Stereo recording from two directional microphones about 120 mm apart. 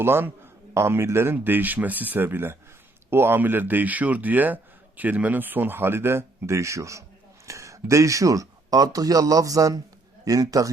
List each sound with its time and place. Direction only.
0.0 s a man's voice: 20° right (ahead or behind)